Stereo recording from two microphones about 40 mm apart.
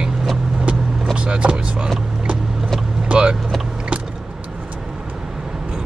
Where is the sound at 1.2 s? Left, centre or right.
Right.